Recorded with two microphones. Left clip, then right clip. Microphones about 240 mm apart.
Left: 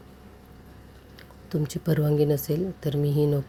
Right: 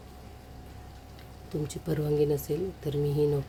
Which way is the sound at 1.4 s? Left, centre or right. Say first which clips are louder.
Left 5 dB; left.